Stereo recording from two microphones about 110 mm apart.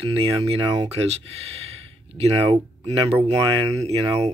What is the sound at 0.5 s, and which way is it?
Speech, 45° right (ahead or behind).